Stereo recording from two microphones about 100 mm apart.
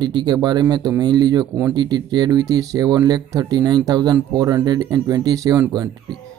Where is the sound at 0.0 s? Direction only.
45° right (ahead or behind).